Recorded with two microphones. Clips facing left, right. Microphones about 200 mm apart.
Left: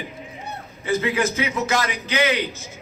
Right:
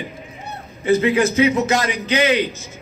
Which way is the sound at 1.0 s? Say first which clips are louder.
Right 7 dB; 25° right (ahead or behind).